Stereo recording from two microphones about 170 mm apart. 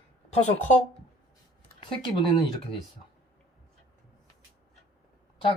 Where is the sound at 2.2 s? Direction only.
25° left (ahead or behind).